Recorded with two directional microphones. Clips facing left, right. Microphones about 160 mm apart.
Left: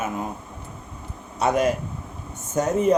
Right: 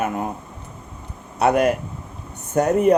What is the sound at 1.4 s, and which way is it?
Speech, 60° right (ahead or behind).